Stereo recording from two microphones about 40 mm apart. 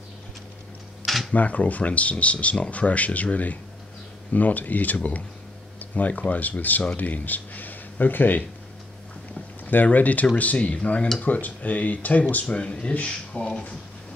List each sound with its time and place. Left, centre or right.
1.0 s camera: centre
1.3 s speech: left
9.7 s speech: left